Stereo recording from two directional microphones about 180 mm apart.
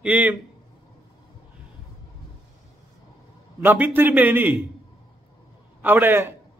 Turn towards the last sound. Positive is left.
turn(degrees=-10)  # may be behind; listen again after turning